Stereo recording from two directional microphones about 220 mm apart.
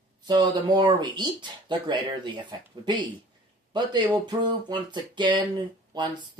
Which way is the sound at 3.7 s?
20° right (ahead or behind).